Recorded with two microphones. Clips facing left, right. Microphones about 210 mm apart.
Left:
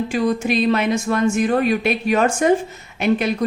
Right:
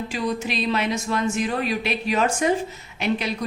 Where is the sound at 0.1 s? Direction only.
50° left (ahead or behind).